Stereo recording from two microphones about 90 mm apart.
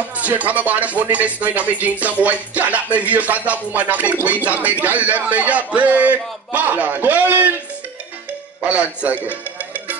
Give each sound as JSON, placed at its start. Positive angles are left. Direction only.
{"t": 0.2, "sound": "speech", "side_deg": -15}
{"t": 8.5, "sound": "speech", "side_deg": -15}